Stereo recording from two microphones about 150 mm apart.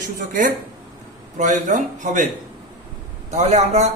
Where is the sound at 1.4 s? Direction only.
55° right (ahead or behind).